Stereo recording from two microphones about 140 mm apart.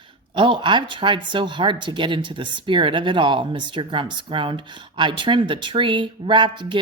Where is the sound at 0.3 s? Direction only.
35° right (ahead or behind).